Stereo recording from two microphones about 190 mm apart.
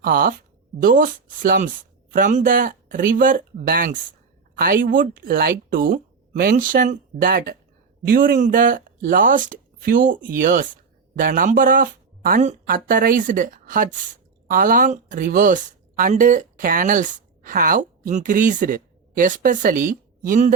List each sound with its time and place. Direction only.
0.0 s speech: 50° right (ahead or behind)